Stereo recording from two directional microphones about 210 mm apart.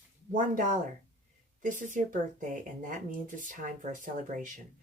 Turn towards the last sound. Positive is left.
turn(degrees=-40)  # may be behind; listen again after turning